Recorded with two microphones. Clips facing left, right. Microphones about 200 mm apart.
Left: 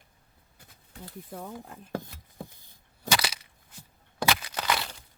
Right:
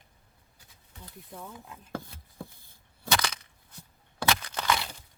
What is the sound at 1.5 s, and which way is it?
Chopping, 55° left (ahead or behind).